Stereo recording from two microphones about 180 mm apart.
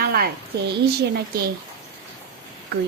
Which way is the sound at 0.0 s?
55° right (ahead or behind).